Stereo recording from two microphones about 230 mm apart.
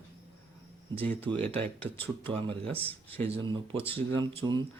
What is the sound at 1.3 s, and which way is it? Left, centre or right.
Speech, right.